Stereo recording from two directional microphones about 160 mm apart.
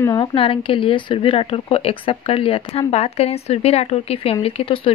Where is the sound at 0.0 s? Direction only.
25° left (ahead or behind).